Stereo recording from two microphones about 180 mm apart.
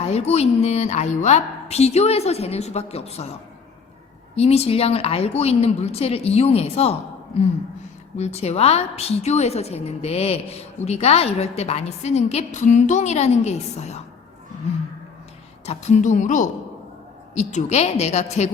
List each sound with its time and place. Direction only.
0.0 s a woman's voice: 35° left (ahead or behind)
4.4 s a woman's voice: 35° left (ahead or behind)
8.1 s a woman's voice: 35° left (ahead or behind)
15.6 s a woman's voice: 40° left (ahead or behind)